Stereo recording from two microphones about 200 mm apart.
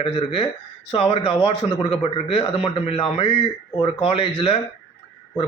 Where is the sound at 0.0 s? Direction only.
25° left (ahead or behind).